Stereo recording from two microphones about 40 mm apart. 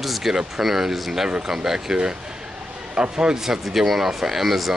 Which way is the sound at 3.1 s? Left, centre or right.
Centre.